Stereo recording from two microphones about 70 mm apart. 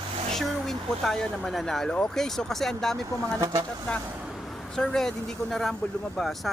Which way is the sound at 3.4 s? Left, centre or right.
Right.